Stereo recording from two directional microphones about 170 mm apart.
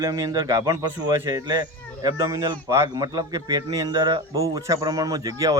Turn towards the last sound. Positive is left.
turn(degrees=-20)  # may be behind; listen again after turning